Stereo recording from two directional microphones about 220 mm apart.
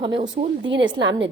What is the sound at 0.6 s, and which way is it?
Speech, 55° right (ahead or behind).